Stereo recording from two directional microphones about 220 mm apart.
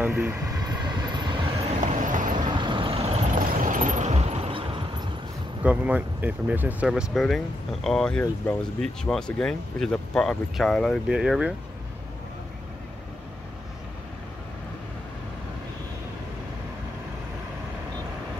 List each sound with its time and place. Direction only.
0.0 s vehicle: 10° right (ahead or behind)
1.8 s vehicle: 35° right (ahead or behind)
2.4 s vehicle: 20° right (ahead or behind)
5.6 s speech: 5° right (ahead or behind)